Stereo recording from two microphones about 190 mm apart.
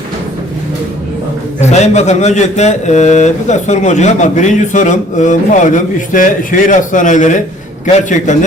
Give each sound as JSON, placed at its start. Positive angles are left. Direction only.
{"t": 1.7, "sound": "speech", "side_deg": 35}